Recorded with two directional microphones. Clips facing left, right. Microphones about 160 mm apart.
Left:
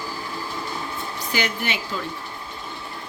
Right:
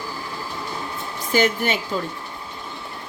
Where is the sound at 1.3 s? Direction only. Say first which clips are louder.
Right 7 dB; 45° right (ahead or behind).